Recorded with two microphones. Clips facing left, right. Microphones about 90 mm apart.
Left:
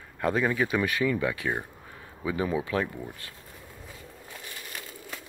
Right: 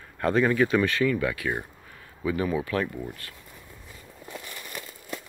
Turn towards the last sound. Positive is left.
turn(degrees=20)  # may be behind; listen again after turning